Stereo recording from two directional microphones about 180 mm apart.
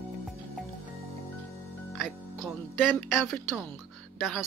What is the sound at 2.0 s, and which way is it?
Music, 5° right (ahead or behind).